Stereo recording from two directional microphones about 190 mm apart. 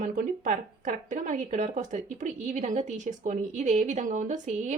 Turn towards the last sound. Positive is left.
turn(degrees=-40)  # may be behind; listen again after turning